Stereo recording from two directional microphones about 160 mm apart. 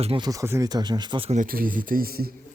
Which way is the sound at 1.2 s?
55° right (ahead or behind).